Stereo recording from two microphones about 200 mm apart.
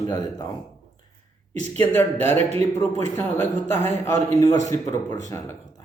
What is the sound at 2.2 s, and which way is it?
Speech, 30° right (ahead or behind).